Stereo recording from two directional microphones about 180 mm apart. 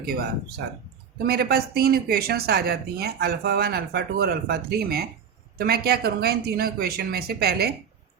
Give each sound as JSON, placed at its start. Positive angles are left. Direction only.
{"t": 0.0, "sound": "speech", "side_deg": -60}